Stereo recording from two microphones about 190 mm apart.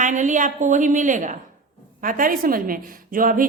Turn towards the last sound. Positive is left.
turn(degrees=-45)  # may be behind; listen again after turning